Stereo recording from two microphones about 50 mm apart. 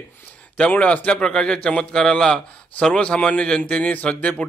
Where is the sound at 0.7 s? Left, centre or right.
Left.